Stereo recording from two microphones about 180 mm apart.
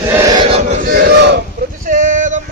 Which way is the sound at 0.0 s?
15° right (ahead or behind).